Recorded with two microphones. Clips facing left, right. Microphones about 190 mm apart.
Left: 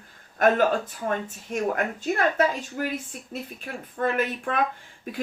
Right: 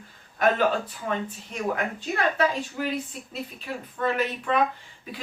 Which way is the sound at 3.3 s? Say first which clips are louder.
Left 2 dB; 50° left (ahead or behind).